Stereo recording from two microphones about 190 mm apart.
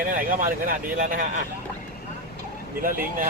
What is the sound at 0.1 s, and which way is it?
Speech, 45° right (ahead or behind).